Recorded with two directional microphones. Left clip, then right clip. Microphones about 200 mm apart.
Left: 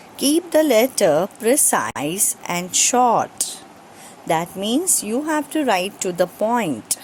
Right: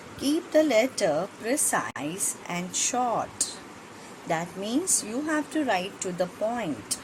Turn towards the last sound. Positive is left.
turn(degrees=45)  # may be behind; listen again after turning